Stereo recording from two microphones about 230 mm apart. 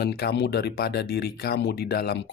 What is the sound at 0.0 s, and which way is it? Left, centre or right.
Speech, left.